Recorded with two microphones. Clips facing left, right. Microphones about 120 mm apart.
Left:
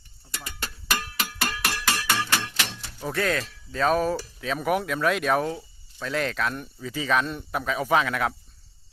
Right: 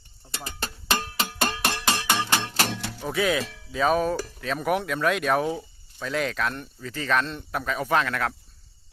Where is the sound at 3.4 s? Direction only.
90° right.